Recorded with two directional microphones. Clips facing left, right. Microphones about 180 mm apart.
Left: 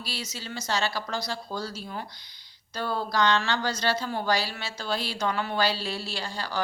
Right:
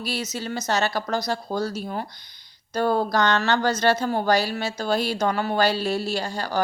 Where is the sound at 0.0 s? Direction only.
50° right (ahead or behind).